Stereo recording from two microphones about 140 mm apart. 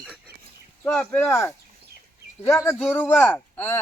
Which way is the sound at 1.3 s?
20° left (ahead or behind).